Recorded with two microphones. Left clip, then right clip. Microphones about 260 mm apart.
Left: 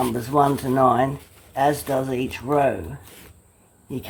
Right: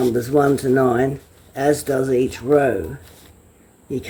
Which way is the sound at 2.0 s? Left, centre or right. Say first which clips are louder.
Right 7 dB; centre.